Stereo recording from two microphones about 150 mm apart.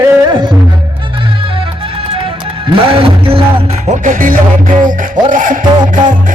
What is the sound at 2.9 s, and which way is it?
Music, 40° right (ahead or behind).